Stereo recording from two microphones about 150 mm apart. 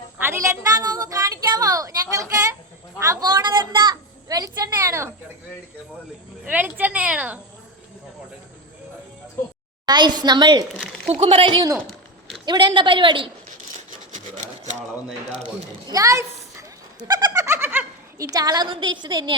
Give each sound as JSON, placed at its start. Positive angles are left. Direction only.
{"t": 0.2, "sound": "a woman's voice", "side_deg": -15}
{"t": 3.0, "sound": "a sound", "side_deg": -25}
{"t": 6.5, "sound": "a woman's voice", "side_deg": -10}
{"t": 9.8, "sound": "a woman's voice", "side_deg": -30}
{"t": 14.1, "sound": "a sound", "side_deg": -55}
{"t": 15.4, "sound": "speech", "side_deg": -25}